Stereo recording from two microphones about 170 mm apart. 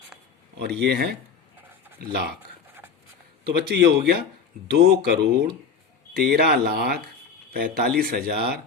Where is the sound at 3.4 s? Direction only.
70° right (ahead or behind).